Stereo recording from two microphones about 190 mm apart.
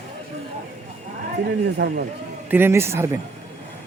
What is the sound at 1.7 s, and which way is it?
Speech, 60° right (ahead or behind).